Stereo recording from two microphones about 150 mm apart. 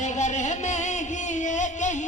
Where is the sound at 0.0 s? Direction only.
55° left (ahead or behind).